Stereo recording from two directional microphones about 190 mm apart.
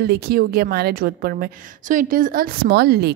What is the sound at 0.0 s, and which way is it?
A woman's voice, 55° right (ahead or behind).